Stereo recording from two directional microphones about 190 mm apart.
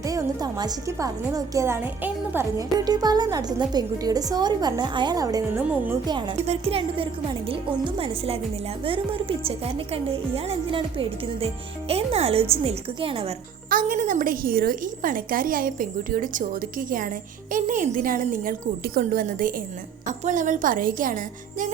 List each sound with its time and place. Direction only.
0.0 s a woman's voice: 15° right (ahead or behind)
6.1 s speech: 25° right (ahead or behind)
13.7 s a woman's voice: 45° right (ahead or behind)